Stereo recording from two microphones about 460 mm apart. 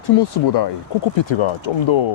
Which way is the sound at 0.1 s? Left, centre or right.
Left.